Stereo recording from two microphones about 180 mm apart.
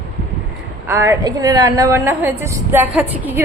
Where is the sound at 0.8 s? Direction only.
15° right (ahead or behind).